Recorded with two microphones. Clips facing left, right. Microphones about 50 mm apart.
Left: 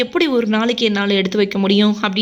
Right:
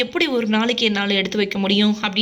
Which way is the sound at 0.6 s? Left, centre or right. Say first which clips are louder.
Left 3 dB; right.